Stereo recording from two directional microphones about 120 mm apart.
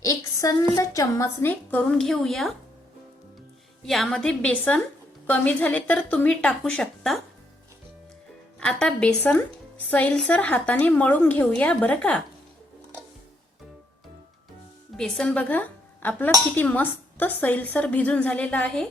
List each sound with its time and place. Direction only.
0.0 s a sound: 25° left (ahead or behind)
0.8 s a woman's voice: 25° left (ahead or behind)
1.5 s a woman's voice: 10° left (ahead or behind)
3.8 s a woman's voice: 5° left (ahead or behind)
8.5 s speech: 10° left (ahead or behind)
14.9 s a woman's voice: 5° left (ahead or behind)